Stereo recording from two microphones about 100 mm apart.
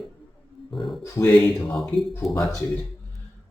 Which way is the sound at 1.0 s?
25° left (ahead or behind).